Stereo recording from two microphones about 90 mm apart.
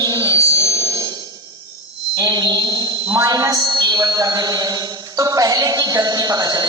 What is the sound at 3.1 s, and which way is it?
A woman's voice, 40° right (ahead or behind).